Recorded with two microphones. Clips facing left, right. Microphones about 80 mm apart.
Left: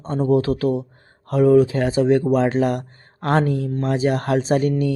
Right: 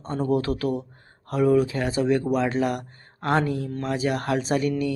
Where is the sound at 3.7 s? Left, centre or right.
Left.